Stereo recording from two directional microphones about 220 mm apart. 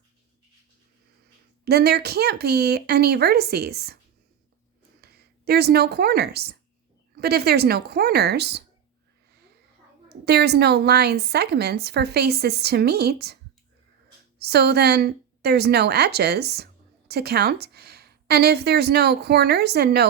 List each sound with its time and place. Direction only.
1.6 s a woman's voice: 45° right (ahead or behind)
5.5 s a woman's voice: 45° right (ahead or behind)
10.2 s a woman's voice: 50° right (ahead or behind)